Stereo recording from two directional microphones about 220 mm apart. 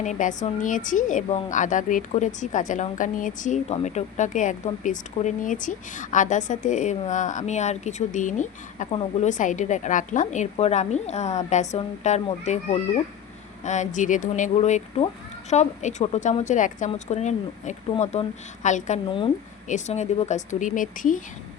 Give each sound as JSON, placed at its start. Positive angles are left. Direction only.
{"t": 0.0, "sound": "a woman's voice", "side_deg": 35}